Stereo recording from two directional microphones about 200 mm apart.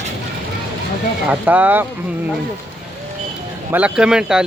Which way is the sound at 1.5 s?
10° right (ahead or behind).